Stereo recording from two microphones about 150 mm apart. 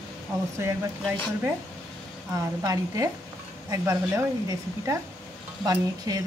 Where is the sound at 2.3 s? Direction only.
25° right (ahead or behind).